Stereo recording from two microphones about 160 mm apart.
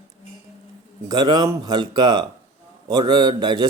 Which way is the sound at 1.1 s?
25° right (ahead or behind).